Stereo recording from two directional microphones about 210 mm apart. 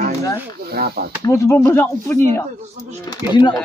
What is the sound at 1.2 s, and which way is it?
Speech, 15° left (ahead or behind).